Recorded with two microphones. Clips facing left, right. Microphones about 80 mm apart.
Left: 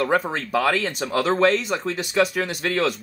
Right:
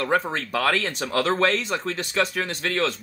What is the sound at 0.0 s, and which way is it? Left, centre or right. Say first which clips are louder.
Speech: left 2 dB; centre.